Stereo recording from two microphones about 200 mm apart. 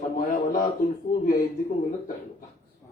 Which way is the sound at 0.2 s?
45° left (ahead or behind).